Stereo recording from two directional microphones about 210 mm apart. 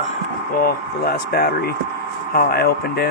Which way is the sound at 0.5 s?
45° left (ahead or behind).